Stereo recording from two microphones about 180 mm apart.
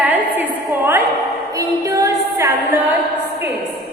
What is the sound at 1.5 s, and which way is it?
Music, 20° right (ahead or behind).